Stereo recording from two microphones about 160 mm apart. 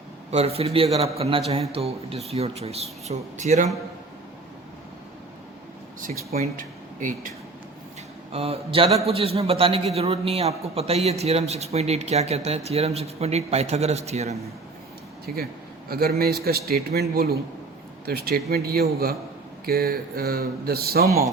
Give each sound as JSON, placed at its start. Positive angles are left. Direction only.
{"t": 0.3, "sound": "a man's voice", "side_deg": -40}
{"t": 6.4, "sound": "speech", "side_deg": -55}
{"t": 8.3, "sound": "a man's voice", "side_deg": -40}
{"t": 15.3, "sound": "a man's voice", "side_deg": -65}